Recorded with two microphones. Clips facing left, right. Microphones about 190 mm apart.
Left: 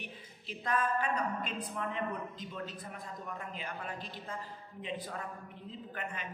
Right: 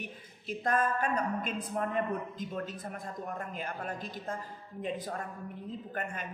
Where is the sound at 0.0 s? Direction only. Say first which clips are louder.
Right 4 dB; 45° right (ahead or behind).